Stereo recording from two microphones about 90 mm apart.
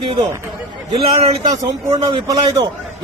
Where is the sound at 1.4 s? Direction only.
45° right (ahead or behind).